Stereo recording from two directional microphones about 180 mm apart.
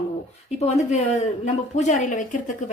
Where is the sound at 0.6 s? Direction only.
40° left (ahead or behind).